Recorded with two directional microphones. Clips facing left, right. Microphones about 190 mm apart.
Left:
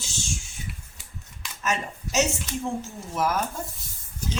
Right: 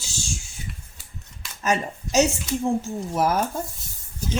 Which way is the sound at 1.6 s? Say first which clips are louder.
Right 5 dB; 35° right (ahead or behind).